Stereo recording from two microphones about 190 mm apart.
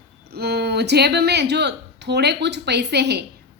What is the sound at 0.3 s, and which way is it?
A woman's voice, 60° right (ahead or behind).